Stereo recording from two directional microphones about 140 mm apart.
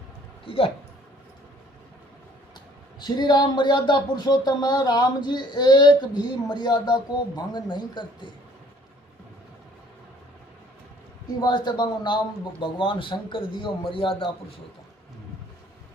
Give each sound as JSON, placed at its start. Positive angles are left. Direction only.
{"t": 0.4, "sound": "speech", "side_deg": 40}
{"t": 3.0, "sound": "speech", "side_deg": 30}
{"t": 11.3, "sound": "speech", "side_deg": 30}